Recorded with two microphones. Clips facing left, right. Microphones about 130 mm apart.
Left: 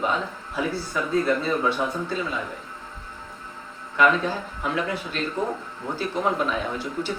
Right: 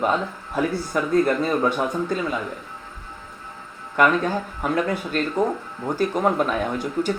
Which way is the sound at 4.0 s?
50° right (ahead or behind).